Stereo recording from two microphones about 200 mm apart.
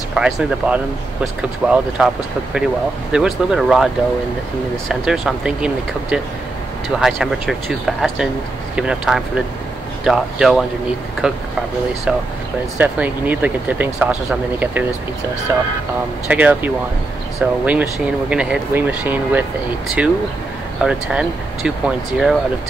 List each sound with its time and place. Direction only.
0.1 s speech: 5° right (ahead or behind)
3.1 s speech: 5° right (ahead or behind)